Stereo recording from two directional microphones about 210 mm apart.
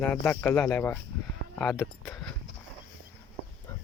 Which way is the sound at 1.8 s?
10° left (ahead or behind).